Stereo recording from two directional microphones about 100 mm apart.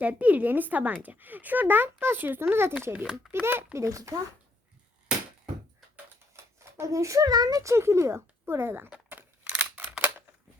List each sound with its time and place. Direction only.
0.0 s speech: 15° right (ahead or behind)
2.9 s speech: 5° right (ahead or behind)
3.8 s speech: 30° right (ahead or behind)
6.3 s speech: 30° right (ahead or behind)
7.6 s speech: 30° right (ahead or behind)
8.9 s a sound: 15° right (ahead or behind)